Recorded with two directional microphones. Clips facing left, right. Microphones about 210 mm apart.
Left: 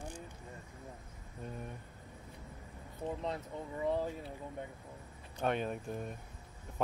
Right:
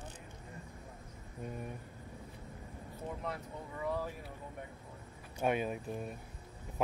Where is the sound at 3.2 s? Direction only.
25° left (ahead or behind).